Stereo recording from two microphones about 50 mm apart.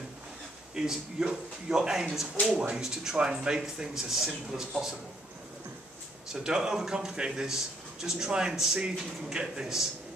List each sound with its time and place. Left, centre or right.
0.7 s a man's voice: centre
6.2 s a man's voice: centre